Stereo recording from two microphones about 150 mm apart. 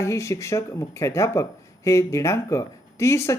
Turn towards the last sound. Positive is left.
turn(degrees=20)  # may be behind; listen again after turning